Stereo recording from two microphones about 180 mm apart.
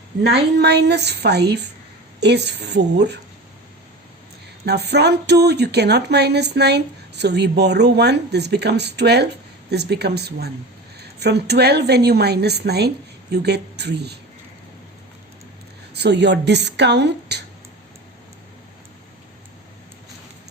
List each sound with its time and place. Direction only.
0.2 s speech: 65° right (ahead or behind)
4.6 s a woman's voice: 65° right (ahead or behind)
16.0 s speech: 70° right (ahead or behind)